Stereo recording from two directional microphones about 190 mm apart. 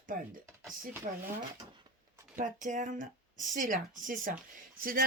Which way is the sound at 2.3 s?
40° right (ahead or behind).